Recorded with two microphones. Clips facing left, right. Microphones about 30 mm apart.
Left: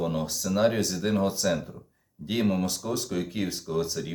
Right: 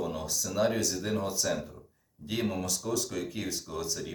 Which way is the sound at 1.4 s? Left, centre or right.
Left.